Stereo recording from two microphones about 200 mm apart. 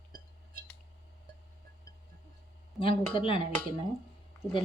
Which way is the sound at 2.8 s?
25° left (ahead or behind).